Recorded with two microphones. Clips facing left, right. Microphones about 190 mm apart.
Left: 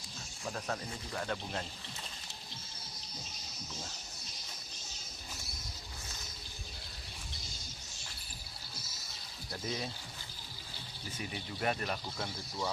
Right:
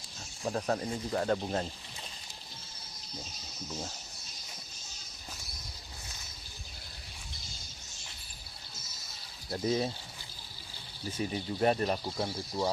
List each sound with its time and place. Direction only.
0.4 s speech: 35° right (ahead or behind)
9.5 s speech: 30° right (ahead or behind)
11.2 s speech: 35° right (ahead or behind)
12.0 s speech: 15° right (ahead or behind)